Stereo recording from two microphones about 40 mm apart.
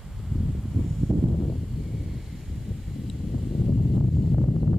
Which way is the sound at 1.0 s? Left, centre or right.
Centre.